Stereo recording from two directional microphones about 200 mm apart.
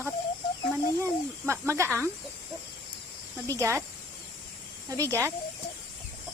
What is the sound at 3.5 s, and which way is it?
Speech, 15° right (ahead or behind).